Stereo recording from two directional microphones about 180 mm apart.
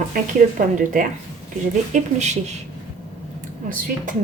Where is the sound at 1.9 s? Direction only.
40° right (ahead or behind).